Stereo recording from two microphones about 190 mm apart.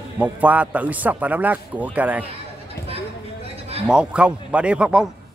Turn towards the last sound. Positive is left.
turn(degrees=-5)  # may be behind; listen again after turning